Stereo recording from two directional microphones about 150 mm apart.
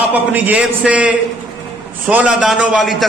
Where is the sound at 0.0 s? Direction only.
10° right (ahead or behind).